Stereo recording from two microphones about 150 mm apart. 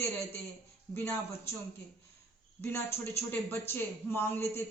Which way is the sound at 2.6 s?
15° left (ahead or behind).